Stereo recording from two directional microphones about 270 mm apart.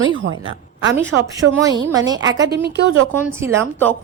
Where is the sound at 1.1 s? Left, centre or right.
Right.